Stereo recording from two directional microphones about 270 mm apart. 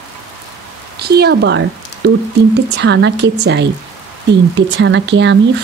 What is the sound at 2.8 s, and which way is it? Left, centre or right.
Speech, right.